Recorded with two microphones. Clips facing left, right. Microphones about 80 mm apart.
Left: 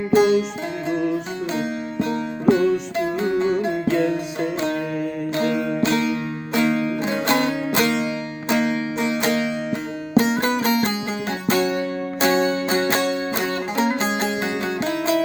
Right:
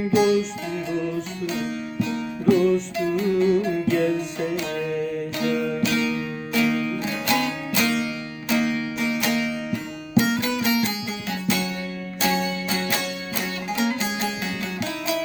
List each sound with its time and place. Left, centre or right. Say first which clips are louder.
0.1 s music: left 3 dB; left
0.9 s music: left 6 dB; left
5.5 s music: left 2 dB; centre
5.8 s music: left 3 dB; left